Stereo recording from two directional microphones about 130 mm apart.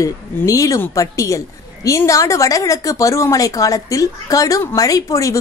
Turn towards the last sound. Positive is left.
turn(degrees=25)  # may be behind; listen again after turning